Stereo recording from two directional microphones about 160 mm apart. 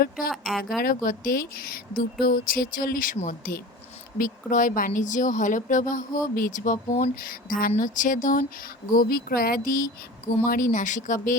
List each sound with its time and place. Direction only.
0.3 s speech: centre (ahead or behind)
0.8 s speech: 60° left (ahead or behind)
7.3 s speech: 60° left (ahead or behind)